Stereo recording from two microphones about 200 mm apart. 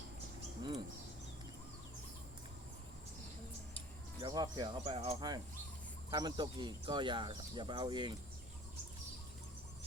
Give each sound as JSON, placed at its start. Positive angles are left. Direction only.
{"t": 4.2, "sound": "speech", "side_deg": -20}